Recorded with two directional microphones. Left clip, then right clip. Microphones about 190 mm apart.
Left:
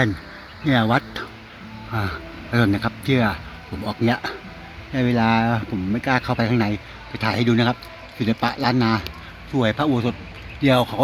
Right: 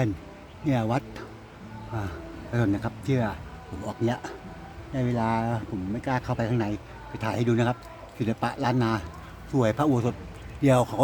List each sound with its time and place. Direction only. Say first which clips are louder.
0.6 s a man's voice: left 8 dB; 10° left (ahead or behind)
9.5 s a man's voice: left 3 dB; 15° right (ahead or behind)